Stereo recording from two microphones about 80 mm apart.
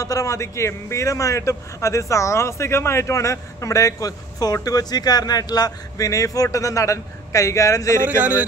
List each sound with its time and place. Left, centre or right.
0.0 s a man's voice: left
8.2 s speech: centre